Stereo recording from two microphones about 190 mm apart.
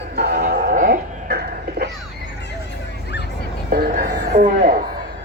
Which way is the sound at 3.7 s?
50° right (ahead or behind).